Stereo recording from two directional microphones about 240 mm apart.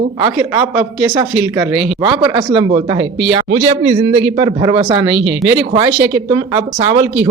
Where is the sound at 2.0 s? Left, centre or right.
Centre.